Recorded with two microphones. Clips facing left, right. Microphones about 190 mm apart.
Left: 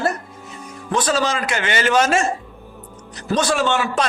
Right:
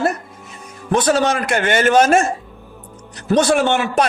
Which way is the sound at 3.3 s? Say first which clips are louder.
Right 4 dB; 55° right (ahead or behind).